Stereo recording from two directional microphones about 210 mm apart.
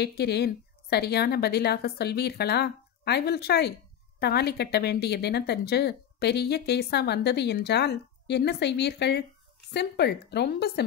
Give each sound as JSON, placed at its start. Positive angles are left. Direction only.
{"t": 0.0, "sound": "a woman's voice", "side_deg": 50}